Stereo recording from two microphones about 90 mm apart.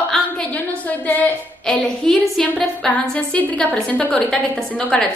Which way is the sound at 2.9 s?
15° left (ahead or behind).